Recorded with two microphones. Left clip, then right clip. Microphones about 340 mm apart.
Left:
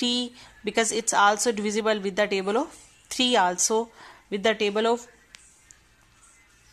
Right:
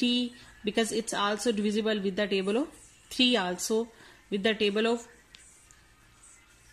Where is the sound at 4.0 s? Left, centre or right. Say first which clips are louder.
Left 4 dB; centre.